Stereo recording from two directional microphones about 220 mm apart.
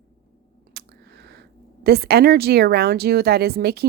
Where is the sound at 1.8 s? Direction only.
45° right (ahead or behind).